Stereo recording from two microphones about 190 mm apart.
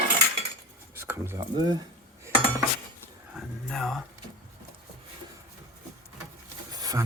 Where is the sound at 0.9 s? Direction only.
10° right (ahead or behind).